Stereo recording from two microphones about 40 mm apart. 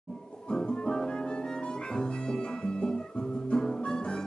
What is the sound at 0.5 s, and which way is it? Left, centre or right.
Music, left.